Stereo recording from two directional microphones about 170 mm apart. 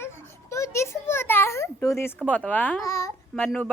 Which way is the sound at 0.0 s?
15° left (ahead or behind).